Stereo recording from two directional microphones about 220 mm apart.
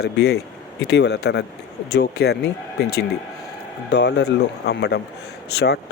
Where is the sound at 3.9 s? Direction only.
50° left (ahead or behind).